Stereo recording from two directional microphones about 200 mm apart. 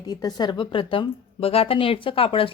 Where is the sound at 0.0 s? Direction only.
20° left (ahead or behind).